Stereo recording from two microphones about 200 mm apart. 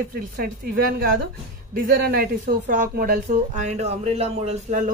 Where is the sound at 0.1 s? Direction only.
45° right (ahead or behind).